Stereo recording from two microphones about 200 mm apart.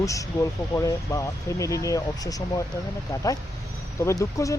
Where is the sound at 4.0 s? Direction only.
15° left (ahead or behind).